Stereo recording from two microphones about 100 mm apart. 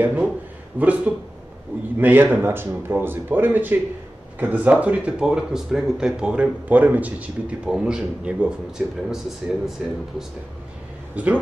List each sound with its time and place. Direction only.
0.0 s speech: 15° right (ahead or behind)
11.2 s speech: 15° right (ahead or behind)